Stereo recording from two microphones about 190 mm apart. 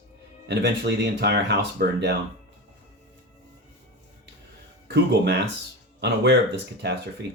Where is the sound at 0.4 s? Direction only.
65° right (ahead or behind).